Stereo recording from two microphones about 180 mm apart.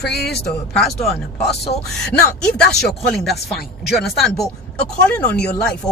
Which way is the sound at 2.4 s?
5° left (ahead or behind).